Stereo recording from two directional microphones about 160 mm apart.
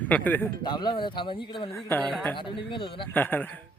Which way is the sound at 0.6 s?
30° left (ahead or behind).